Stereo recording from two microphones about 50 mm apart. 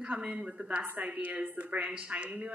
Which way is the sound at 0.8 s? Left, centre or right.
Right.